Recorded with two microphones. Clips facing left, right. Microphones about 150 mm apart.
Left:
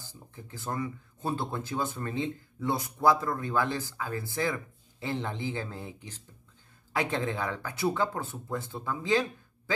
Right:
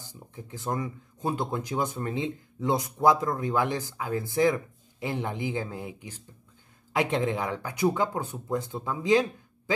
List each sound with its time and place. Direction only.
0.0 s speech: 15° right (ahead or behind)